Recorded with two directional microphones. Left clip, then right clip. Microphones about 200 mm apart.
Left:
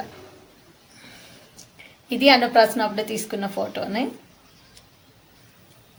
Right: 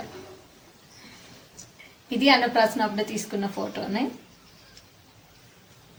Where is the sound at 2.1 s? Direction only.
45° left (ahead or behind).